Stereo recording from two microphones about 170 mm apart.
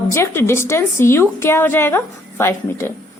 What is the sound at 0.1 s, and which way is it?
A woman's voice, 15° left (ahead or behind).